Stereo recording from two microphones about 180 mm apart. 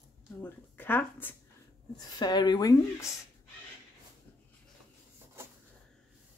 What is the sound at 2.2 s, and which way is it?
Speech, 25° left (ahead or behind).